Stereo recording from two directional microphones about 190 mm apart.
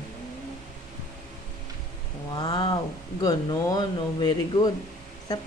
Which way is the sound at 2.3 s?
20° left (ahead or behind).